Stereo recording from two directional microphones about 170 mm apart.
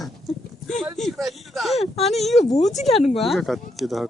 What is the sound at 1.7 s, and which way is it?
Speech, 35° left (ahead or behind).